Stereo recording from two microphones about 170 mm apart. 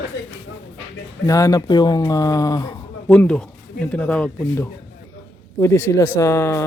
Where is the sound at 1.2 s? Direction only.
20° left (ahead or behind).